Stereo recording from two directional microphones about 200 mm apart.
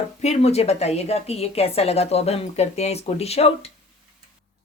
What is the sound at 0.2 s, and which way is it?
A woman's voice, 35° left (ahead or behind).